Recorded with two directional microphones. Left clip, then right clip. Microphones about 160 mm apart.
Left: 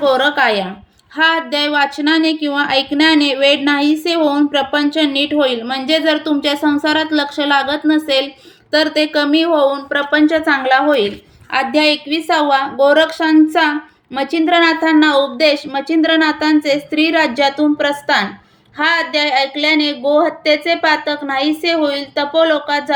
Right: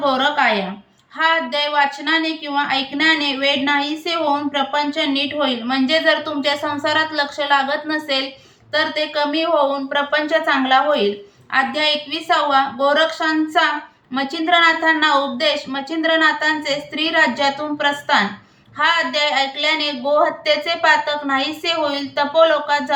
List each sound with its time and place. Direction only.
0.0 s a woman's voice: 45° left (ahead or behind)